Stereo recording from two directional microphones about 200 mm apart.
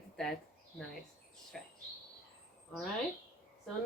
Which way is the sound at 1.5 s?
Centre (ahead or behind).